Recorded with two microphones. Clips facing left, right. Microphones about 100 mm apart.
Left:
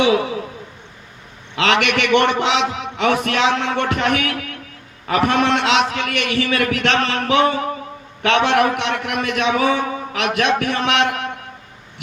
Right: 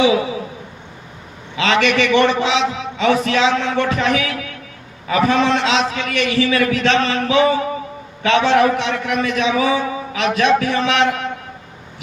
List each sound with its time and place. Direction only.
0.0 s a man's voice: 60° left (ahead or behind)
1.5 s a man's voice: 60° left (ahead or behind)